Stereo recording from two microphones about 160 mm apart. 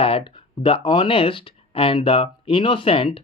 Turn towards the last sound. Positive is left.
turn(degrees=35)  # may be behind; listen again after turning